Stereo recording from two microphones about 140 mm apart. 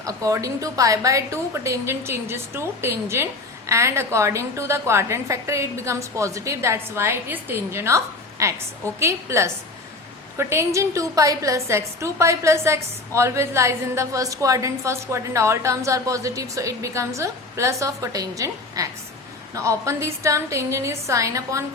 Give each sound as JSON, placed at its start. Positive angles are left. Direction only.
{"t": 0.0, "sound": "a woman's voice", "side_deg": -25}